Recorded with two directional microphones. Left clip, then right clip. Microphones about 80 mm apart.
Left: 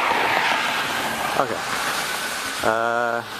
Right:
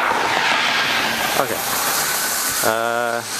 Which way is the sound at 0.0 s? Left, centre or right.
Left.